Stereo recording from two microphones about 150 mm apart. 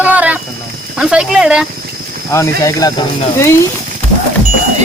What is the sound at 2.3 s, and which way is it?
Speech, 20° left (ahead or behind).